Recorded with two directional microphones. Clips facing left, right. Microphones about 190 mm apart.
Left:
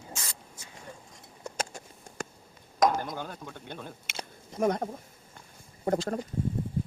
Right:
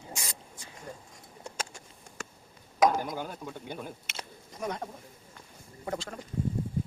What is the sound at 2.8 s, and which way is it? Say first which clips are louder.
Speech: right 1 dB; 10° right (ahead or behind).